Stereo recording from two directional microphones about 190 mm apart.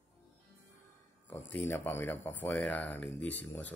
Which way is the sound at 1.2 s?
10° left (ahead or behind).